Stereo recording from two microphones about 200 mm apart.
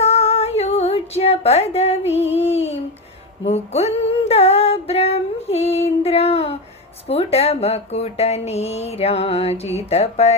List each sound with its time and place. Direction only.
0.0 s a sound: 30° left (ahead or behind)
3.4 s female singing: 30° left (ahead or behind)
7.1 s speech: 30° left (ahead or behind)